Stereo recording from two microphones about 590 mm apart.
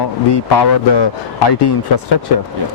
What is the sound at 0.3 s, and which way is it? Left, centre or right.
Speech, left.